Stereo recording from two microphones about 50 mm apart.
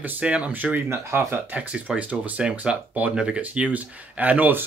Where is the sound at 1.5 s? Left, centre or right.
Right.